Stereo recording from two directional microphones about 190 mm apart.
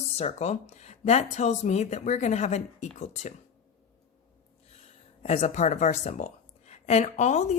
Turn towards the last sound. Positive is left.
turn(degrees=40)  # may be behind; listen again after turning